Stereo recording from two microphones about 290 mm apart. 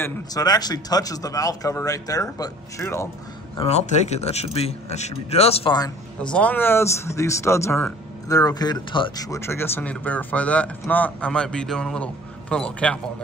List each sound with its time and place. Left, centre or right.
0.0 s speech: centre
3.5 s speech: left
6.2 s speech: centre